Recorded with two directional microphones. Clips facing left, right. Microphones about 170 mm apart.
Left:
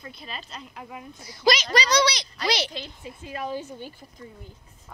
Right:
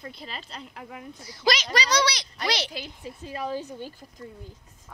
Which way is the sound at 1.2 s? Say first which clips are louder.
Left 3 dB; 15° left (ahead or behind).